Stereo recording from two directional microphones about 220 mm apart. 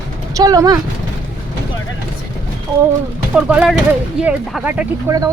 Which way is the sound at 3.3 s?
5° right (ahead or behind).